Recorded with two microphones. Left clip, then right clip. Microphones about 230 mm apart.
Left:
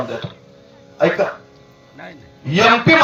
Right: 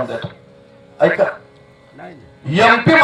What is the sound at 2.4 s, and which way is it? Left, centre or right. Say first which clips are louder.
Speech: right 1 dB; centre.